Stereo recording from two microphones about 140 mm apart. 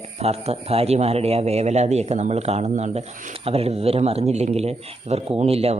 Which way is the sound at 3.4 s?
45° right (ahead or behind).